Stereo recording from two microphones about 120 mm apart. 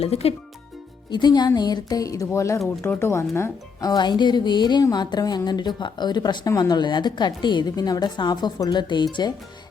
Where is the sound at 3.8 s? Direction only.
35° left (ahead or behind).